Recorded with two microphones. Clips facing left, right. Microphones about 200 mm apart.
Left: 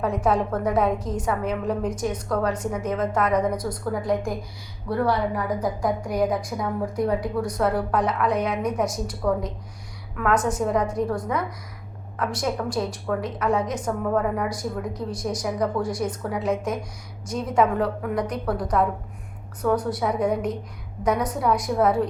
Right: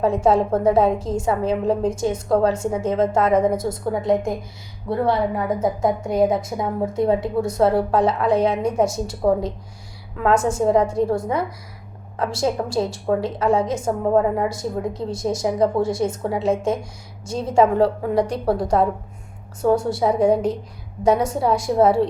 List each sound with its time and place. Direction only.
0.0 s a woman's voice: 25° right (ahead or behind)